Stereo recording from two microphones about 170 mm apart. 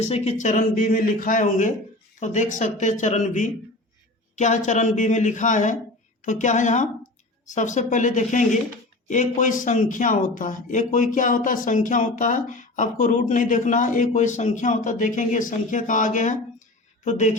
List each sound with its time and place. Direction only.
0.0 s speech: 40° left (ahead or behind)